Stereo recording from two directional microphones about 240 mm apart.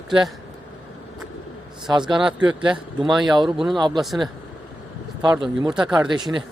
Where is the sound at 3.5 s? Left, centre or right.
Centre.